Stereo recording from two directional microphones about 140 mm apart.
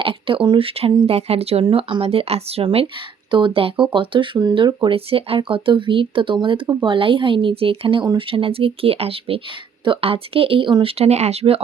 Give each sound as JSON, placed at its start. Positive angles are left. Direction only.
{"t": 0.0, "sound": "speech", "side_deg": -40}